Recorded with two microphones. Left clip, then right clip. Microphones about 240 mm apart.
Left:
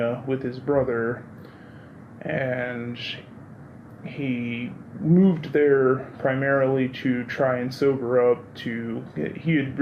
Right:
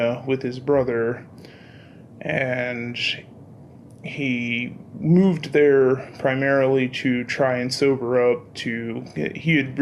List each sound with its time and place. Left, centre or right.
0.0 s speech: right
2.1 s speech: right